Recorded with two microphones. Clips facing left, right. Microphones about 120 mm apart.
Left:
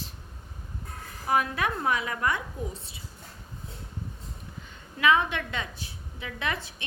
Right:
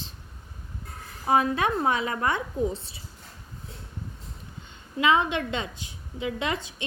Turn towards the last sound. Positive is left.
turn(degrees=-20)  # may be behind; listen again after turning